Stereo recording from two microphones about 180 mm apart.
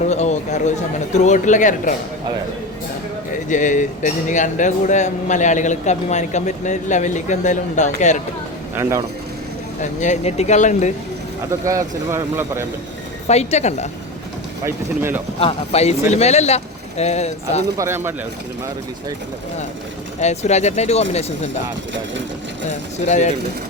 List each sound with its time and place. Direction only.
0.1 s speech: 40° left (ahead or behind)
3.5 s speech: 45° left (ahead or behind)
8.7 s speech: 15° right (ahead or behind)
9.8 s speech: 40° left (ahead or behind)
11.6 s speech: 15° right (ahead or behind)
13.2 s speech: 35° left (ahead or behind)
14.6 s speech: 15° right (ahead or behind)
15.4 s speech: 35° left (ahead or behind)
17.7 s speech: 15° right (ahead or behind)
20.1 s speech: 40° left (ahead or behind)
23.0 s speech: 40° left (ahead or behind)